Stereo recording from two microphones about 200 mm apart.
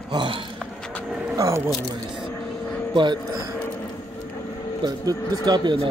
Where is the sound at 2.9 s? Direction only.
25° right (ahead or behind).